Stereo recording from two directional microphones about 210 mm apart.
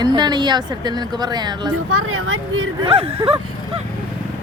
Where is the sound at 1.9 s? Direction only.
80° right.